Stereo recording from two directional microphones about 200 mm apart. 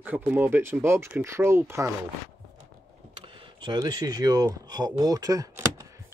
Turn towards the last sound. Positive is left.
turn(degrees=-15)  # may be behind; listen again after turning